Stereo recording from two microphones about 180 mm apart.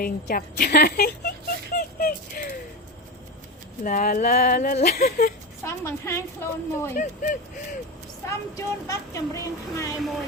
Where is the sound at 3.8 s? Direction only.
45° left (ahead or behind).